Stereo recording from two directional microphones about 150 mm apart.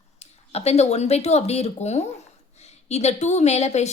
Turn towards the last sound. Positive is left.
turn(degrees=50)  # may be behind; listen again after turning